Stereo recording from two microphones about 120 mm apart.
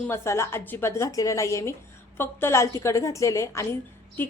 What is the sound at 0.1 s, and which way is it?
A woman's voice, 20° left (ahead or behind).